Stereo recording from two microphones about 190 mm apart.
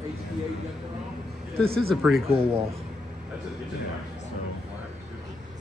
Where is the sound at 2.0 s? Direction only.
Centre (ahead or behind).